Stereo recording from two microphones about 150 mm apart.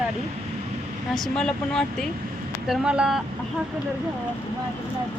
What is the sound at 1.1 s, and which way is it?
Speech, 5° left (ahead or behind).